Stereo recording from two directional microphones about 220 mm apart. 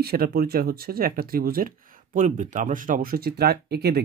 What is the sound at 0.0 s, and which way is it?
Speech, 45° right (ahead or behind).